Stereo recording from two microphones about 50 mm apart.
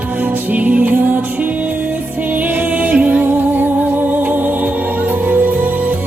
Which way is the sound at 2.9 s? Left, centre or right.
Right.